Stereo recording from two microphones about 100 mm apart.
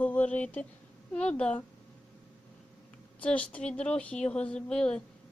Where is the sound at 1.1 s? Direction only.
10° left (ahead or behind).